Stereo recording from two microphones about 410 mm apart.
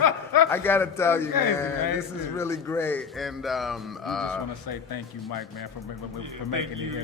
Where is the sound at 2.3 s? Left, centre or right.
Centre.